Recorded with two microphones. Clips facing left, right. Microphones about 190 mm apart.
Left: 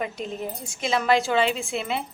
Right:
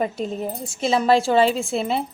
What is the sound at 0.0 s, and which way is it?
A woman's voice, 35° right (ahead or behind).